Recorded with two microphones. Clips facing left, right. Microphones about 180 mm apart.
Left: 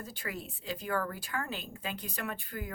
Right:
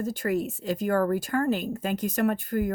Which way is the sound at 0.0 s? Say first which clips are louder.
Right 14 dB; 45° right (ahead or behind).